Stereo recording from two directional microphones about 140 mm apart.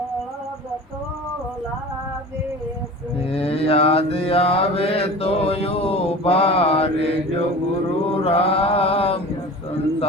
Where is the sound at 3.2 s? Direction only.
45° left (ahead or behind).